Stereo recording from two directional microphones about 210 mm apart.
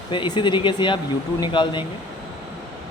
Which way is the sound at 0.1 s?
20° left (ahead or behind).